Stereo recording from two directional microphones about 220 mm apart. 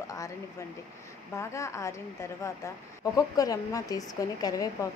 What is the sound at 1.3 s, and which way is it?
Speech, 15° left (ahead or behind).